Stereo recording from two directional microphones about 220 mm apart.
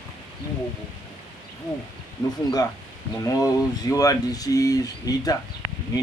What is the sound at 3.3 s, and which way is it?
Speech, 15° left (ahead or behind).